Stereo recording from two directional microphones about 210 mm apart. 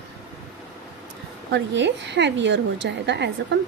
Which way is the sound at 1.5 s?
55° right (ahead or behind).